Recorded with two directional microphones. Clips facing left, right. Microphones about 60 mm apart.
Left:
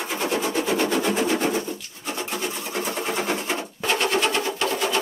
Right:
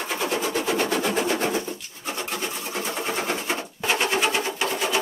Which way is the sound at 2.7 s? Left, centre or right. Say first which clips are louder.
Left 1 dB; centre.